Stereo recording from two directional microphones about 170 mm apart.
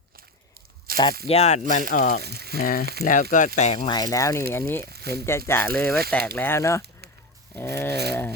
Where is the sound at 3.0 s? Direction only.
50° left (ahead or behind).